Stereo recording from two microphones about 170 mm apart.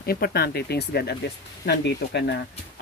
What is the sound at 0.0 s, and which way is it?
Speech, 65° left (ahead or behind).